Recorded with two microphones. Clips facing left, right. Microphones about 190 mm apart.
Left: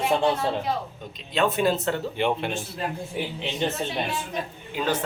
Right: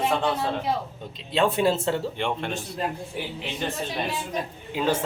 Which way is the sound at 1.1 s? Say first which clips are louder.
Right 1 dB; 30° right (ahead or behind).